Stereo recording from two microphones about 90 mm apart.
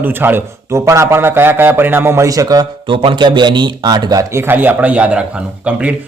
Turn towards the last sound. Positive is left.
turn(degrees=-15)  # may be behind; listen again after turning